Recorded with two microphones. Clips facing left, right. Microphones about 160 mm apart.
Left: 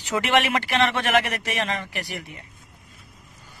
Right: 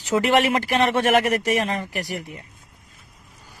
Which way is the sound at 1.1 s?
40° right (ahead or behind).